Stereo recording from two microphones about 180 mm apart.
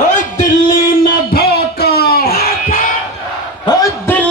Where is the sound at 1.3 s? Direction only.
60° left (ahead or behind).